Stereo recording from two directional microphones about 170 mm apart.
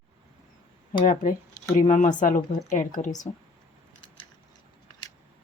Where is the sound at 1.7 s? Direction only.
45° left (ahead or behind).